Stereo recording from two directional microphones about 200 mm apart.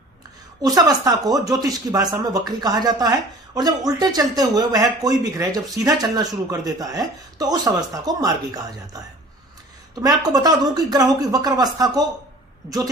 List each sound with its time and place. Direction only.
0.6 s speech: 20° right (ahead or behind)